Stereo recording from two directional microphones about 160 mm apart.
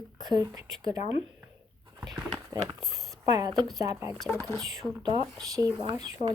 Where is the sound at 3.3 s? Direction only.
25° right (ahead or behind).